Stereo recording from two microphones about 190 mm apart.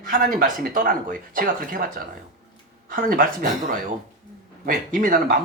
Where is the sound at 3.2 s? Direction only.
45° right (ahead or behind).